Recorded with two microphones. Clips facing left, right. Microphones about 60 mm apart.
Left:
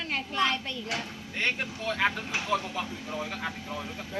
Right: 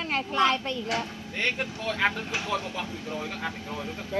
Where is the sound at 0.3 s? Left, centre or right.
Right.